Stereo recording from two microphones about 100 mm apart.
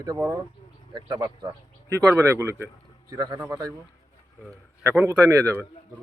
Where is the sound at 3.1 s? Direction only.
40° right (ahead or behind).